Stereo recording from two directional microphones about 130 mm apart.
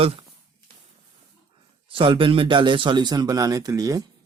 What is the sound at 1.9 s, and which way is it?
Speech, 40° right (ahead or behind).